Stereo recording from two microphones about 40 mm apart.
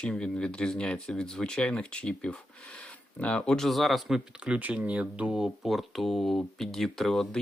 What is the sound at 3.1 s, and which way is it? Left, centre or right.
Speech, left.